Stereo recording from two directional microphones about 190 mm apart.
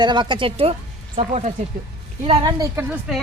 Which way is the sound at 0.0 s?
25° right (ahead or behind).